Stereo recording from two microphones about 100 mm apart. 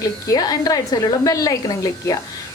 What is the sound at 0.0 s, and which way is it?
Speech, 35° left (ahead or behind).